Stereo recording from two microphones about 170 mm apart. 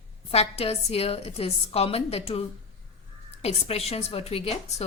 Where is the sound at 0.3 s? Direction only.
35° left (ahead or behind).